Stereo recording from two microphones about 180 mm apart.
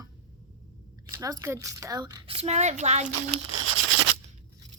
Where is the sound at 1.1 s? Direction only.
20° right (ahead or behind).